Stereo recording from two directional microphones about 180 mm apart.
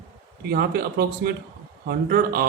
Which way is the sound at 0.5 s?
55° right (ahead or behind).